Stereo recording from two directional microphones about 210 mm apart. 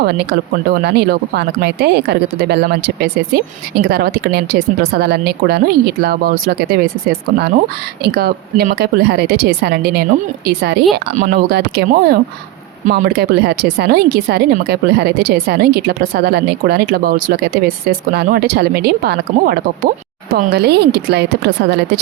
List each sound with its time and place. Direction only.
0.0 s speech: 50° right (ahead or behind)